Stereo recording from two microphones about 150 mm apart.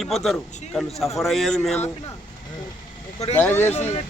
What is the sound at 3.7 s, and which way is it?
Speech, 45° left (ahead or behind).